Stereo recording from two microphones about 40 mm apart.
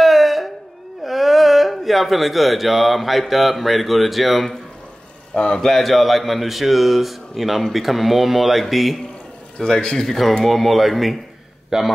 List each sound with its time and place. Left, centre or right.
0.0 s a sound: centre
1.0 s speech: centre
5.3 s speech: centre
5.7 s speech: centre
9.6 s a man's voice: centre
11.7 s speech: centre